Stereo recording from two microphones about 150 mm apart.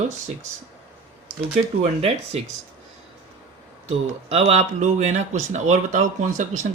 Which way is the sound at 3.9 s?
45° right (ahead or behind).